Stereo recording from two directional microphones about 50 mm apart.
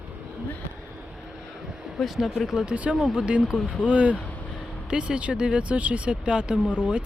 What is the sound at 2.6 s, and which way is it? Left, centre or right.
Speech, right.